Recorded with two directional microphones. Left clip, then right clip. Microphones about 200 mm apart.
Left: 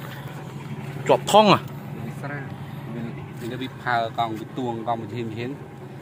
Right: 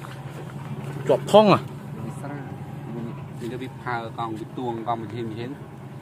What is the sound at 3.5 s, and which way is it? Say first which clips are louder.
Speech: left 6 dB; 55° left (ahead or behind).